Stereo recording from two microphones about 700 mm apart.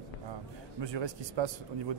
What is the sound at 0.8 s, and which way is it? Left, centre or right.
Speech, right.